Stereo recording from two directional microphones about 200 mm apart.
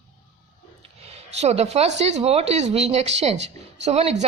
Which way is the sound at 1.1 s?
30° right (ahead or behind).